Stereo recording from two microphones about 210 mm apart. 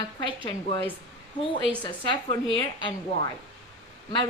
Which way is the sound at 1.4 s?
20° left (ahead or behind).